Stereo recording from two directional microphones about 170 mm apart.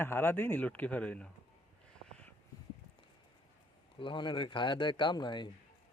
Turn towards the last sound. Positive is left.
turn(degrees=25)  # may be behind; listen again after turning